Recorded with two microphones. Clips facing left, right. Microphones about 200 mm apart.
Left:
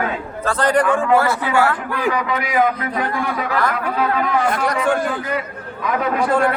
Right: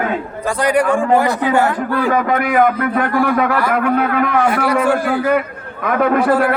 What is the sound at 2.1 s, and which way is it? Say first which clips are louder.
A man's voice: right 4 dB; 50° right (ahead or behind).